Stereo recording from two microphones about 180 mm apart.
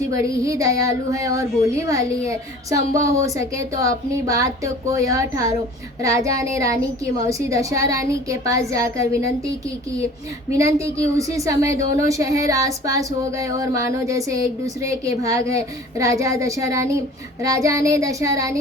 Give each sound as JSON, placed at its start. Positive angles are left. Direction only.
{"t": 0.1, "sound": "a woman's voice", "side_deg": -20}